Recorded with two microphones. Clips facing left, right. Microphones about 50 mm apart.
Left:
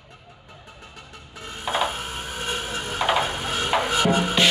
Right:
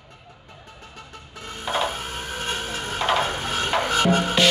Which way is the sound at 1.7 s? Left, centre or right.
Centre.